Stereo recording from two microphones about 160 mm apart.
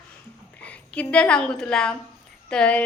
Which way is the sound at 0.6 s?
5° left (ahead or behind).